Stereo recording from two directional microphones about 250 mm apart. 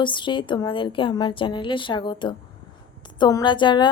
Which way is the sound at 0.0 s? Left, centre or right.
Centre.